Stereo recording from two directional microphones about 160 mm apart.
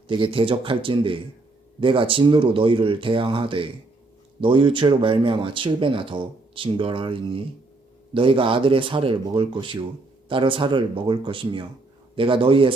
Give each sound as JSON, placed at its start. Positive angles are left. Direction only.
{"t": 0.1, "sound": "speech", "side_deg": -30}